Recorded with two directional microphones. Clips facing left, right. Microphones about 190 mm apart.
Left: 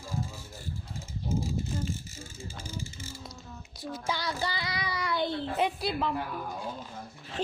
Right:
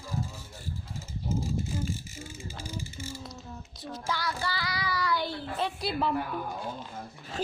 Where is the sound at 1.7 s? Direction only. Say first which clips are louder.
Even; 5° right (ahead or behind).